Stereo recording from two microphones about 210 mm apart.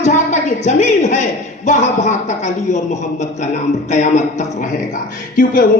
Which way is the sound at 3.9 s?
35° left (ahead or behind).